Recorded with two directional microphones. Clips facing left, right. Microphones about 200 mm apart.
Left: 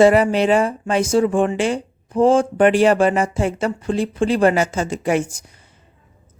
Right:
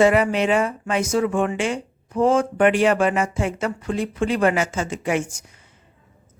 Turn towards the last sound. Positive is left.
turn(degrees=35)  # may be behind; listen again after turning